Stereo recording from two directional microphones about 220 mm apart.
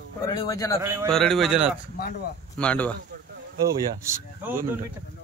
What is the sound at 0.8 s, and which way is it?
Speech, 10° right (ahead or behind).